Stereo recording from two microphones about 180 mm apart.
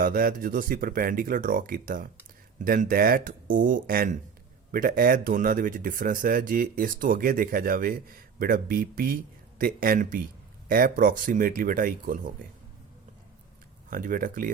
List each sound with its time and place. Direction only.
0.0 s speech: 50° right (ahead or behind)
13.9 s speech: 50° right (ahead or behind)